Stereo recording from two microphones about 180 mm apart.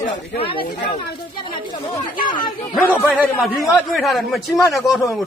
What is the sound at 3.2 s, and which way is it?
A man's voice, 10° left (ahead or behind).